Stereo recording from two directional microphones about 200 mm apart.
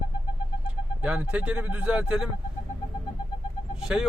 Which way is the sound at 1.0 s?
5° right (ahead or behind).